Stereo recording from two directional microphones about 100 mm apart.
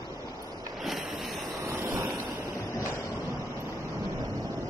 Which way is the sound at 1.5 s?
25° right (ahead or behind).